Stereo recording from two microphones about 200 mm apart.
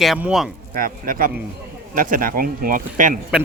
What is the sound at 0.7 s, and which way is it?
Speech, 45° right (ahead or behind).